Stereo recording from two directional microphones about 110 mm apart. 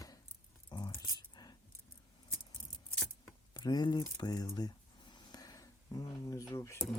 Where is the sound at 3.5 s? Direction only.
40° left (ahead or behind).